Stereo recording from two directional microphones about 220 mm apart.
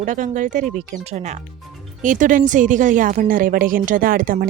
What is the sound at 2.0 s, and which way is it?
Speech, 35° right (ahead or behind).